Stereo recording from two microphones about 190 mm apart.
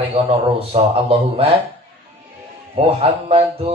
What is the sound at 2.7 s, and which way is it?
Speech, 30° right (ahead or behind).